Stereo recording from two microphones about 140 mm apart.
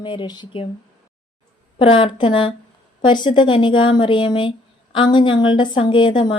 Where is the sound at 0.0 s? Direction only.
35° left (ahead or behind).